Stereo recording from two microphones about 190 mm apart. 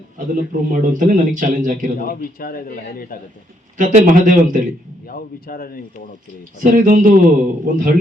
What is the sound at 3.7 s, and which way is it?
Speech, 45° right (ahead or behind).